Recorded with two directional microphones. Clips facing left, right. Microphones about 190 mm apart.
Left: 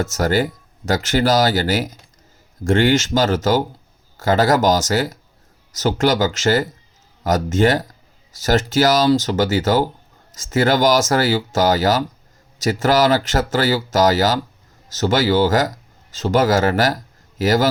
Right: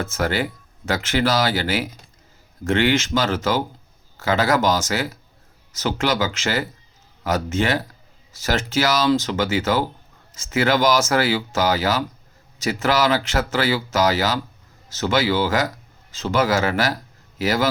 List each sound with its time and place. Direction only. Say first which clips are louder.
0.0 s a man's voice: left 4 dB; 45° left (ahead or behind)